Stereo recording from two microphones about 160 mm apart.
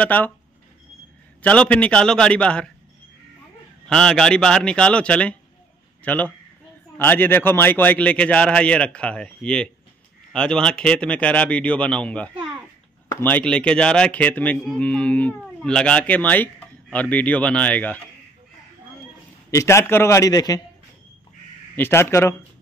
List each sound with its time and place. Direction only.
0.0 s speech: 10° left (ahead or behind)
1.4 s speech: 10° left (ahead or behind)
3.8 s a man's voice: 5° left (ahead or behind)
19.5 s a man's voice: 20° left (ahead or behind)
21.7 s speech: 15° left (ahead or behind)